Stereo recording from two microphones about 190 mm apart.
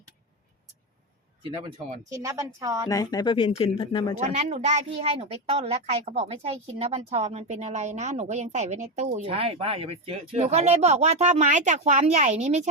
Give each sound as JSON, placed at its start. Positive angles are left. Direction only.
{"t": 2.0, "sound": "a woman's voice", "side_deg": -15}
{"t": 2.9, "sound": "speech", "side_deg": 20}
{"t": 4.2, "sound": "a woman's voice", "side_deg": -35}